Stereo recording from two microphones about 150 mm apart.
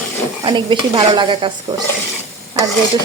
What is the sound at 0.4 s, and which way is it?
Speech, 30° right (ahead or behind).